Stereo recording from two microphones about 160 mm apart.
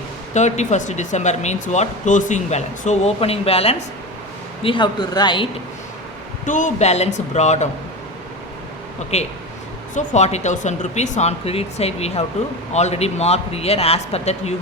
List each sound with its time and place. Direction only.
0.3 s speech: 45° left (ahead or behind); by 5.5 s 30° left (ahead or behind)
6.4 s speech: 50° left (ahead or behind)
9.1 s a man's voice: 45° left (ahead or behind)